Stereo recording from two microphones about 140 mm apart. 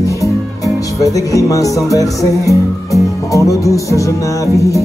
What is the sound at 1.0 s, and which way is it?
Speech, 25° left (ahead or behind).